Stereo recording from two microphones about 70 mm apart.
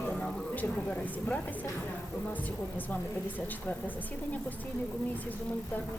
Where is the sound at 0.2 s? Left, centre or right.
Centre.